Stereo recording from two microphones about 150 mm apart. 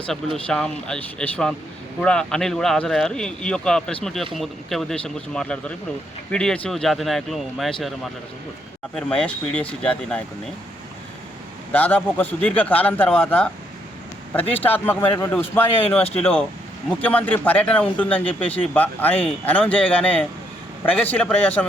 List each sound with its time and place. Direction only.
0.4 s speech: 5° left (ahead or behind)
9.0 s speech: 5° left (ahead or behind)
11.7 s speech: 10° left (ahead or behind)
16.0 s speech: 40° left (ahead or behind)
17.0 s speech: 10° left (ahead or behind)